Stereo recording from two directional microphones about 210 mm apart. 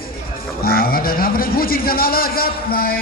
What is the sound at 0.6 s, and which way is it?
A man's voice, 45° left (ahead or behind).